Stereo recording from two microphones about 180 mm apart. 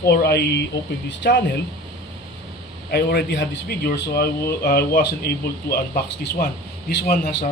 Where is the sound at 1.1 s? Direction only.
75° left (ahead or behind).